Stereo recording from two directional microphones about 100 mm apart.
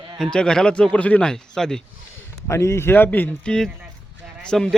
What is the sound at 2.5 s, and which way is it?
Speech, 30° left (ahead or behind).